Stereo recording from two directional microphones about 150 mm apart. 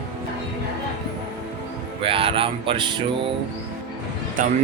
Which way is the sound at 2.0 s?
35° right (ahead or behind).